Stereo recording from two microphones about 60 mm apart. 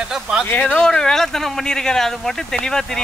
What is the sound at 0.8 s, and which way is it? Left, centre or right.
Speech, centre.